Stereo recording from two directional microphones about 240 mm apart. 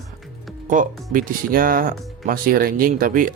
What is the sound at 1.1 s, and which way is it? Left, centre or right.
Speech, right.